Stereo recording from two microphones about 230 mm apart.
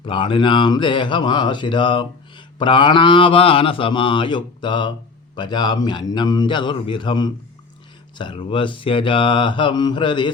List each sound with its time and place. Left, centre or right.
0.0 s speech: left